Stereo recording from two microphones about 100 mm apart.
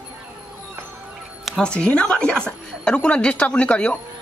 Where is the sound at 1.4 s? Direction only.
5° left (ahead or behind).